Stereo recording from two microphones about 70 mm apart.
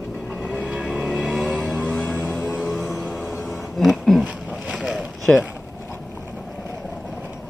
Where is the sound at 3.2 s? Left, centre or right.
Centre.